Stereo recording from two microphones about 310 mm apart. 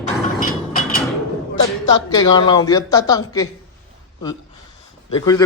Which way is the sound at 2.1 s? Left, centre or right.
Centre.